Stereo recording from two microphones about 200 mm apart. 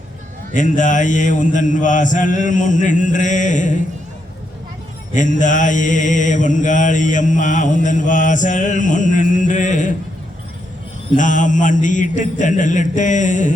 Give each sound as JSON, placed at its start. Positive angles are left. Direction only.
{"t": 0.5, "sound": "mantra", "side_deg": 40}
{"t": 5.1, "sound": "mantra", "side_deg": 40}
{"t": 11.2, "sound": "mantra", "side_deg": 40}